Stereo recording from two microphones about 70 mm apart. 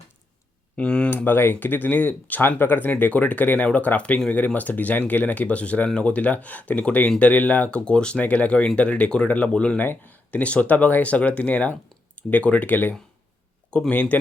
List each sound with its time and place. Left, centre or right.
0.8 s speech: centre
1.1 s speech: left
9.8 s speech: left